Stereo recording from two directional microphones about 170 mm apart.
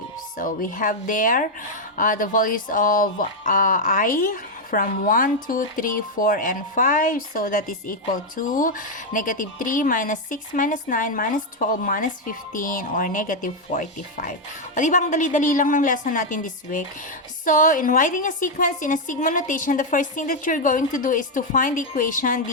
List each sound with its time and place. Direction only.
0.3 s speech: 55° left (ahead or behind)